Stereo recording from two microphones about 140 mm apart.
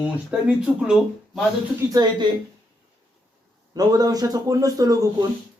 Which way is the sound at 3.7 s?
30° right (ahead or behind).